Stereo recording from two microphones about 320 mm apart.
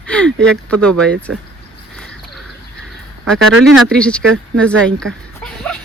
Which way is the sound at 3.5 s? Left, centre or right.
Right.